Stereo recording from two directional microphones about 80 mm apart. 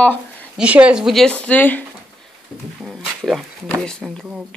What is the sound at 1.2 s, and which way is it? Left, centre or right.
Speech, centre.